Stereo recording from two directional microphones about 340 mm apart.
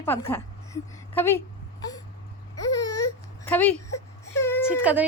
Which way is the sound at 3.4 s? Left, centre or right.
Centre.